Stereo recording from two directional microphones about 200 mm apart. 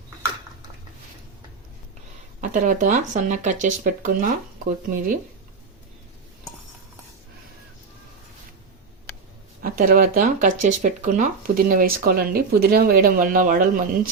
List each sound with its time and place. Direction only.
2.4 s speech: 40° right (ahead or behind)
9.6 s speech: 45° right (ahead or behind)